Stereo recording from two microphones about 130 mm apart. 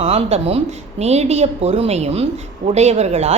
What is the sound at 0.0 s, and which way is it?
A woman's voice, 50° right (ahead or behind).